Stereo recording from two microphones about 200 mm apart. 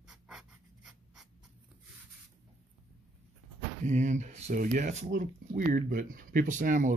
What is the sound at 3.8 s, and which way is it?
Speech, 35° right (ahead or behind).